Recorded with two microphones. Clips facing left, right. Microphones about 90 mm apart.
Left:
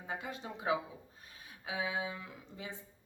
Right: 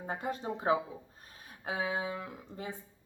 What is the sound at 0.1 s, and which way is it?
Speech, 45° right (ahead or behind).